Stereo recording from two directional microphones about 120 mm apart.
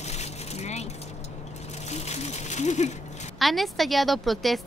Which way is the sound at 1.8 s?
65° left (ahead or behind).